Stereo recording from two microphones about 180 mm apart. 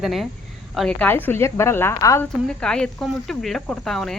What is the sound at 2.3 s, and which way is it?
Speech, 5° left (ahead or behind).